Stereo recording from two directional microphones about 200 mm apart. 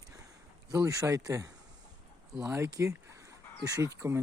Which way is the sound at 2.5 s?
15° right (ahead or behind).